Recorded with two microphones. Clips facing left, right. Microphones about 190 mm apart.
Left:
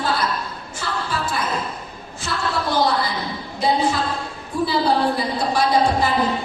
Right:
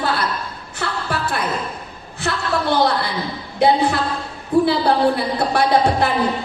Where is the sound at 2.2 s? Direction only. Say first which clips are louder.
Right 5 dB; 65° right (ahead or behind).